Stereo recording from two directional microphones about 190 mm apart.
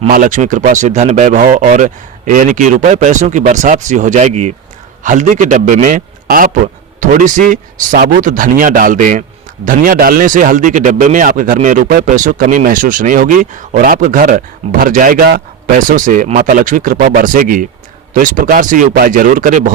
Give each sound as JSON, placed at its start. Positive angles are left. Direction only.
{"t": 0.1, "sound": "a man's voice", "side_deg": -45}